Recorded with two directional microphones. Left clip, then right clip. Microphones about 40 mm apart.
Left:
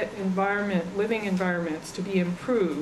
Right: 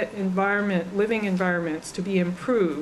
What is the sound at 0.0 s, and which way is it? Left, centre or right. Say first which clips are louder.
Speech: right 2 dB; right.